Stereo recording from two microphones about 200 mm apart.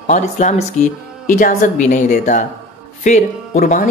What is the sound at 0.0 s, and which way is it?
A man's voice, 35° left (ahead or behind).